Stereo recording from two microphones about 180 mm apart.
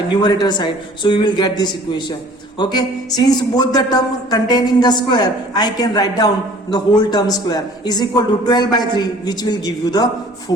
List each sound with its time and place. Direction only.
0.1 s speech: 25° left (ahead or behind)